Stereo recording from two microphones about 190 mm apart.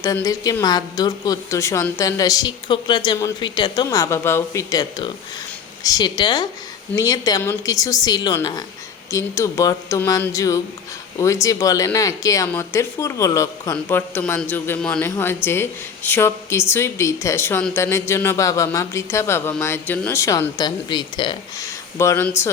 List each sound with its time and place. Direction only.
0.0 s a woman's voice: 20° left (ahead or behind)